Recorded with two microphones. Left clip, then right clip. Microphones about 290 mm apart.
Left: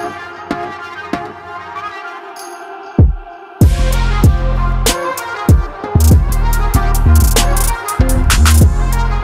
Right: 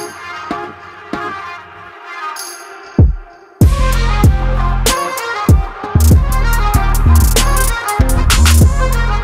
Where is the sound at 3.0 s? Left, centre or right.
Centre.